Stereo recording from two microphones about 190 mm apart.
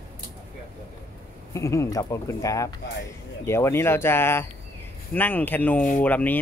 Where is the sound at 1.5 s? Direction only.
15° left (ahead or behind).